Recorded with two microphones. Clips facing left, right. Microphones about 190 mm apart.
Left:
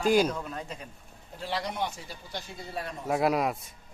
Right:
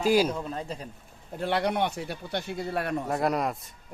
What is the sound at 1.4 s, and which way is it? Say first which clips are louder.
Speech: right 6 dB; 60° right (ahead or behind).